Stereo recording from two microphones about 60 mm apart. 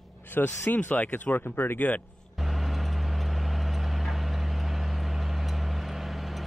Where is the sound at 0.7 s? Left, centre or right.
Left.